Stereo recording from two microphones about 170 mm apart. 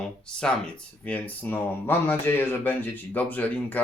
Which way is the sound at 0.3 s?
5° left (ahead or behind).